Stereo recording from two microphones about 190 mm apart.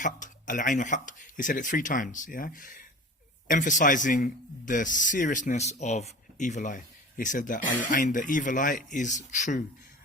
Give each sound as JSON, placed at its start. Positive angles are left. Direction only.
{"t": 0.0, "sound": "speech", "side_deg": 45}